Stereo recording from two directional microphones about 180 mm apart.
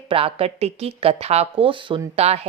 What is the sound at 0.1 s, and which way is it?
Speech, 30° right (ahead or behind).